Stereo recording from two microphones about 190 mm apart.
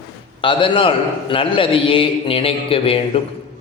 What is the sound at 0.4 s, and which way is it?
A man's voice, 25° left (ahead or behind).